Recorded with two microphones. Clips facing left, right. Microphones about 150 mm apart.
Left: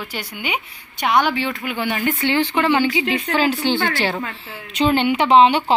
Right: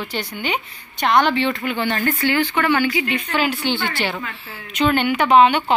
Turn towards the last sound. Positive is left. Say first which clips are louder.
# left 1 dB
turn(degrees=25)  # may be behind; listen again after turning